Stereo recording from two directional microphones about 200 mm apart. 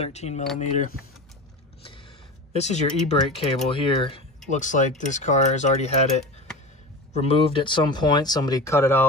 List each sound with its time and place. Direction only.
0.0 s speech: 35° left (ahead or behind)
2.5 s speech: 35° left (ahead or behind)
4.5 s speech: 35° left (ahead or behind)
7.2 s speech: 25° left (ahead or behind)